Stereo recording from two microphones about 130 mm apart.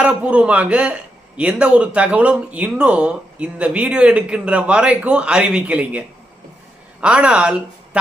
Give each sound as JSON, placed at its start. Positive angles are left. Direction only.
{"t": 0.0, "sound": "speech", "side_deg": -10}
{"t": 7.0, "sound": "speech", "side_deg": -10}